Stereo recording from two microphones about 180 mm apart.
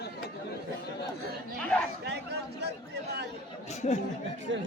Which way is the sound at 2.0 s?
70° right (ahead or behind).